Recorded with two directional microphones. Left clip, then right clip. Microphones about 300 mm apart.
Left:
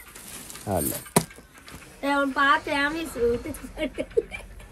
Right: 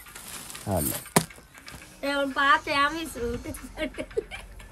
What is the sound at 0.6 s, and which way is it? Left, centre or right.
Speech, centre.